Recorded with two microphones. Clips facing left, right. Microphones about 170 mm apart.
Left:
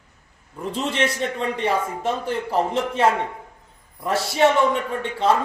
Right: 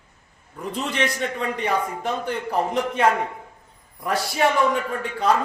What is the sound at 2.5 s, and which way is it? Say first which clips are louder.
Speech: left 1 dB; 30° left (ahead or behind).